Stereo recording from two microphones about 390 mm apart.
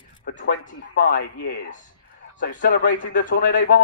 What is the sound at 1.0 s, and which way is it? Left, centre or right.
Speech, left.